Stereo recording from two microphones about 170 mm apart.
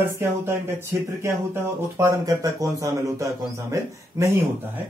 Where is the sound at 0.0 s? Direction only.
15° right (ahead or behind).